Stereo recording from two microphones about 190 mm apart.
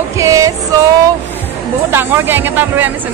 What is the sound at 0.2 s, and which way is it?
Music, 15° right (ahead or behind).